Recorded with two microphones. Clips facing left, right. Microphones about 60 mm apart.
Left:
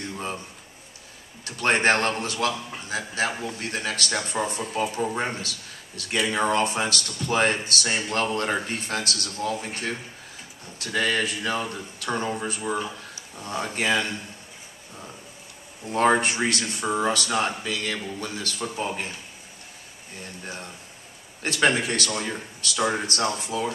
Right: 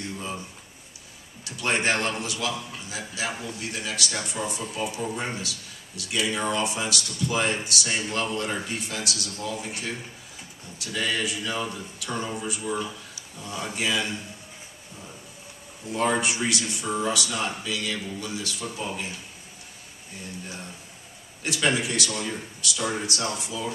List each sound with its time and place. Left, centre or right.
1.4 s speech: left
12.7 s speech: left
13.4 s speech: left
15.9 s speech: left
20.4 s speech: left